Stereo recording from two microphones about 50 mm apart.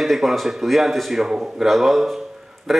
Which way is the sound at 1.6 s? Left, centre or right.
Centre.